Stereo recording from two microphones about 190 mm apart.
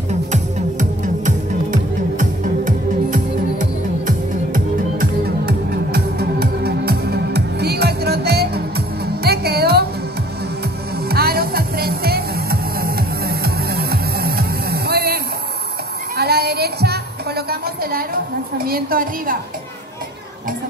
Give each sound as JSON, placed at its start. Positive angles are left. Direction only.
{"t": 0.1, "sound": "music", "side_deg": -40}
{"t": 4.9, "sound": "music", "side_deg": -55}
{"t": 11.1, "sound": "music", "side_deg": -55}
{"t": 16.2, "sound": "music", "side_deg": -55}
{"t": 17.5, "sound": "a sound", "side_deg": -50}